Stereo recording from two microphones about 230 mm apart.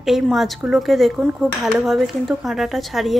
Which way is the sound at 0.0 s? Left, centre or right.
Centre.